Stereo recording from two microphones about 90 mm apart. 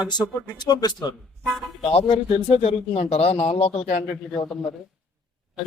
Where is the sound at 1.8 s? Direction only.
90° left.